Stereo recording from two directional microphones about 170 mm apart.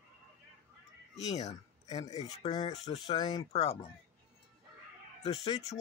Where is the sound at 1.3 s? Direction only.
40° left (ahead or behind).